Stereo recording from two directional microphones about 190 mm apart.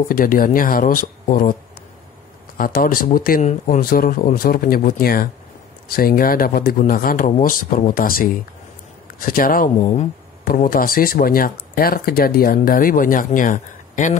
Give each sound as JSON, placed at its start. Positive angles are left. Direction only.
{"t": 0.1, "sound": "speech", "side_deg": 45}